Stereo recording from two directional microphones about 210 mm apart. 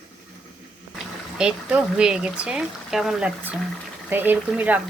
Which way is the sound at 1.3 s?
5° right (ahead or behind).